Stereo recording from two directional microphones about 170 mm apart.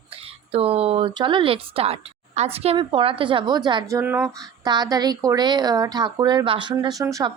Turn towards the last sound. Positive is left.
turn(degrees=-20)  # may be behind; listen again after turning